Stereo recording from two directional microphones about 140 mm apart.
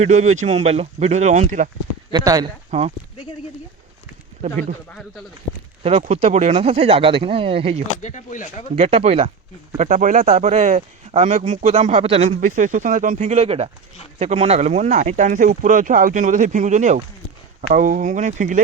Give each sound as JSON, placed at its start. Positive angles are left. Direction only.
{"t": 0.0, "sound": "speech", "side_deg": -55}
{"t": 2.1, "sound": "speech", "side_deg": -30}
{"t": 2.6, "sound": "speech", "side_deg": -50}
{"t": 4.4, "sound": "speech", "side_deg": -55}
{"t": 6.0, "sound": "speech", "side_deg": -50}
{"t": 8.0, "sound": "speech", "side_deg": 65}
{"t": 8.7, "sound": "speech", "side_deg": -50}
{"t": 9.7, "sound": "speech", "side_deg": -60}
{"t": 12.4, "sound": "speech", "side_deg": -70}
{"t": 17.7, "sound": "speech", "side_deg": -70}